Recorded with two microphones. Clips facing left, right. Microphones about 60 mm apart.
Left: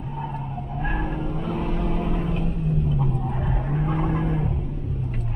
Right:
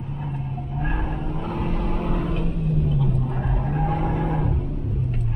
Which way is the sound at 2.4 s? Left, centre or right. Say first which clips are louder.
Right 1 dB; right.